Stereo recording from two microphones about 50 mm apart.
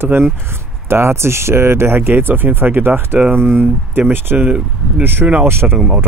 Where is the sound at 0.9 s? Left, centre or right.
Right.